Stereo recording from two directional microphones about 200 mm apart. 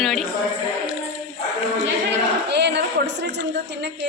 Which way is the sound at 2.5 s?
60° right (ahead or behind).